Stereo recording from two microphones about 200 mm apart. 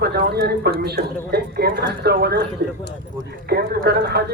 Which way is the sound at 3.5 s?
50° right (ahead or behind).